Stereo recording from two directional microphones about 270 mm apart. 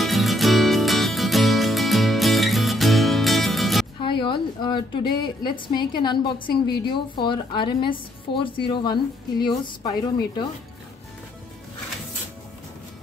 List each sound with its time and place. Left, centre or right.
0.0 s music: centre
4.0 s a sound: centre
5.1 s a woman's voice: centre